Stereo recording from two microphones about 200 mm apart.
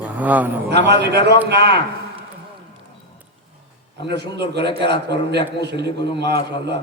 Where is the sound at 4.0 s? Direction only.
55° right (ahead or behind).